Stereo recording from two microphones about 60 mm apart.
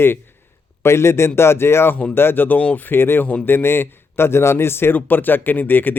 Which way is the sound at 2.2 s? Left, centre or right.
Left.